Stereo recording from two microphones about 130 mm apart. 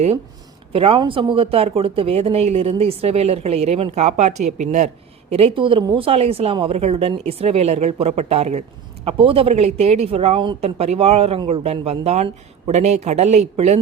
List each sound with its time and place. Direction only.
0.7 s speech: 45° right (ahead or behind); by 4.9 s 65° right (ahead or behind)
5.3 s speech: 50° right (ahead or behind)
9.0 s speech: 45° right (ahead or behind)
10.6 s a man's voice: 50° right (ahead or behind)